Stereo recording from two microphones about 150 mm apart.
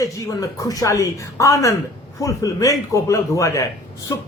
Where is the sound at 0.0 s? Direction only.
20° left (ahead or behind).